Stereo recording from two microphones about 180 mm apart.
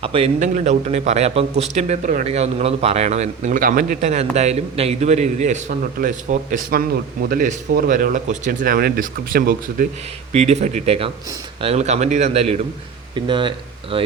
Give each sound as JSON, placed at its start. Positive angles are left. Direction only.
{"t": 0.0, "sound": "speech", "side_deg": -30}
{"t": 0.3, "sound": "speech", "side_deg": -45}
{"t": 10.3, "sound": "speech", "side_deg": -40}